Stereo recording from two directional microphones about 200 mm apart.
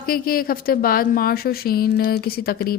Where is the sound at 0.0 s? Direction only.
45° left (ahead or behind).